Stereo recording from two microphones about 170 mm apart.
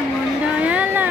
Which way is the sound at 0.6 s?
10° right (ahead or behind).